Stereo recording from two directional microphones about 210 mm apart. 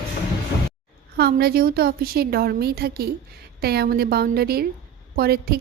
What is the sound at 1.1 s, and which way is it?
A woman's voice, 50° right (ahead or behind).